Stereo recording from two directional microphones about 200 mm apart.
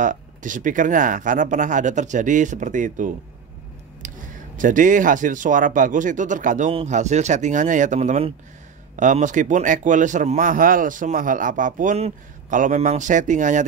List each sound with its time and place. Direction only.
0.0 s a man's voice: 40° right (ahead or behind)
4.0 s a sound: 40° right (ahead or behind)
4.6 s a man's voice: 40° right (ahead or behind)